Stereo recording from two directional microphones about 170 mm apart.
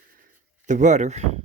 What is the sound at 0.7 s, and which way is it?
Speech, 45° right (ahead or behind).